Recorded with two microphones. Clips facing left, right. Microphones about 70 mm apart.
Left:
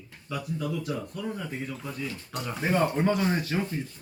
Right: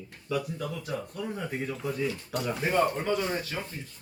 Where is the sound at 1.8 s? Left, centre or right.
Centre.